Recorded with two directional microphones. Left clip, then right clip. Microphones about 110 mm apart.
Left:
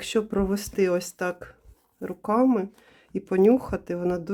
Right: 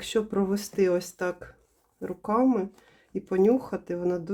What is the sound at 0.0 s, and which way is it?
Speech, 30° left (ahead or behind).